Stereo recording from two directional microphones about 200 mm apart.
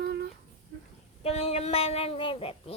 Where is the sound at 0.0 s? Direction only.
55° right (ahead or behind).